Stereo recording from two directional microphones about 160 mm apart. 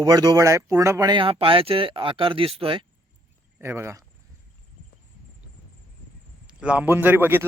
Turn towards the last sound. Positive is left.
turn(degrees=-15)  # may be behind; listen again after turning